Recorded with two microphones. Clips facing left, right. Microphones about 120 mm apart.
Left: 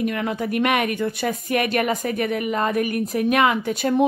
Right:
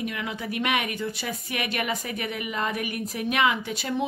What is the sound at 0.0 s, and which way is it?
Speech, 50° left (ahead or behind).